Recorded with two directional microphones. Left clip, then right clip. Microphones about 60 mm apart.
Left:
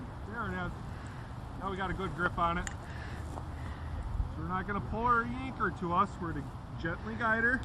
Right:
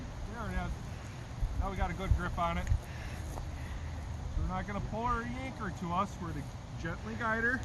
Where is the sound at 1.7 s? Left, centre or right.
Right.